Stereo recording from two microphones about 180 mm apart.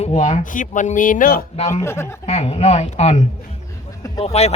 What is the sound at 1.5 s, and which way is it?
Speech, 35° left (ahead or behind).